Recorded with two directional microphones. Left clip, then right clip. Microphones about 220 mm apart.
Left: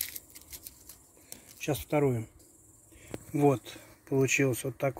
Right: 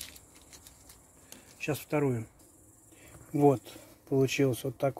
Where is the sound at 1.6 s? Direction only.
25° left (ahead or behind).